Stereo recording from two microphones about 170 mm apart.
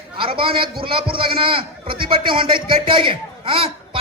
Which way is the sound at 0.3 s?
30° right (ahead or behind).